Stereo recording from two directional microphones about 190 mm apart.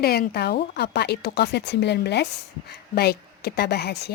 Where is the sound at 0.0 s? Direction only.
55° left (ahead or behind).